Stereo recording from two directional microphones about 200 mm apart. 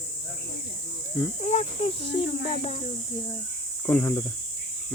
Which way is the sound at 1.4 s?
35° left (ahead or behind).